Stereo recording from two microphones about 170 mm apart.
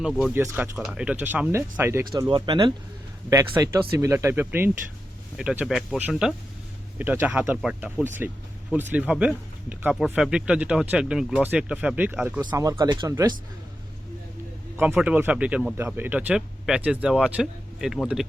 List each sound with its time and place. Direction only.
0.0 s speech: 5° right (ahead or behind)
2.1 s speech: 25° right (ahead or behind); by 12.4 s 5° right (ahead or behind)
12.4 s speech: 25° right (ahead or behind)
14.9 s speech: 10° right (ahead or behind)